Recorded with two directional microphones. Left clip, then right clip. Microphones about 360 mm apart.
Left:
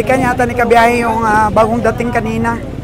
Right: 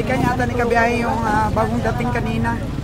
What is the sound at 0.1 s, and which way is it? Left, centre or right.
Speech, centre.